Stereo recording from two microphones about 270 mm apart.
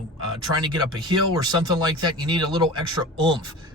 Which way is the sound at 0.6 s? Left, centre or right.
Centre.